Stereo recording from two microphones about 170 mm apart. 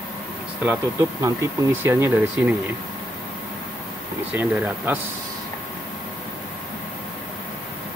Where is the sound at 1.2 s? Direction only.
15° right (ahead or behind).